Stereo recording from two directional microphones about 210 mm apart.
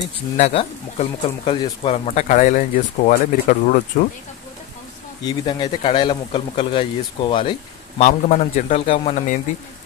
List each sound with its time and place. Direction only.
0.4 s speech: 30° left (ahead or behind)
5.2 s a man's voice: 25° left (ahead or behind)
8.0 s speech: 35° left (ahead or behind)